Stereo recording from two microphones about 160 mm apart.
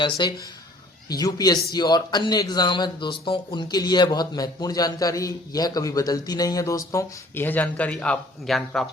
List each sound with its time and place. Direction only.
0.0 s a man's voice: 30° left (ahead or behind); by 8.9 s centre (ahead or behind)